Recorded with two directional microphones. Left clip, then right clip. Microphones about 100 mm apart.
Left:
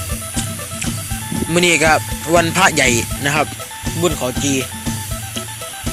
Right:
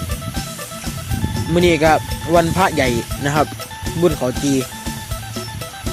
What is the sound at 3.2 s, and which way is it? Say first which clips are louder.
Speech: right 1 dB; 40° right (ahead or behind).